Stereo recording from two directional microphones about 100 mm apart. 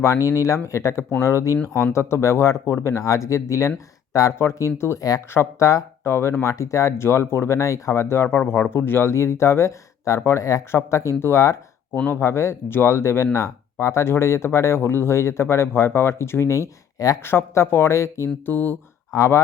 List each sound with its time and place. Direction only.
0.0 s speech: 30° left (ahead or behind)
19.1 s speech: 30° left (ahead or behind)